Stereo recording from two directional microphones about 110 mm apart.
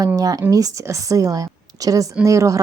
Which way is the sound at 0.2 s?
35° right (ahead or behind).